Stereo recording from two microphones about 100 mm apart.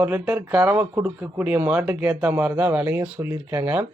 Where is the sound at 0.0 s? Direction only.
20° right (ahead or behind).